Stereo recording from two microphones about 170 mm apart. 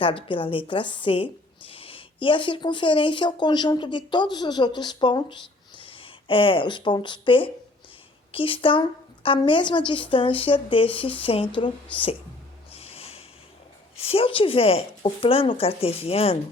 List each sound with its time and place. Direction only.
0.0 s a woman's voice: 30° left (ahead or behind)
12.7 s music: 35° left (ahead or behind)
13.9 s a woman's voice: 35° left (ahead or behind)